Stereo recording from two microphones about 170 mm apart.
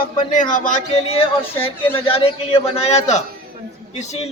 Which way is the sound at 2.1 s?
35° left (ahead or behind).